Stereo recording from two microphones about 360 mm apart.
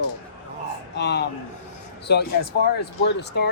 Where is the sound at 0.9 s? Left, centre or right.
Left.